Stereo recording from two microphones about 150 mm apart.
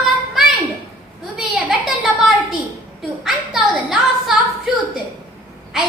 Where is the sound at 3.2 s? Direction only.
Centre (ahead or behind).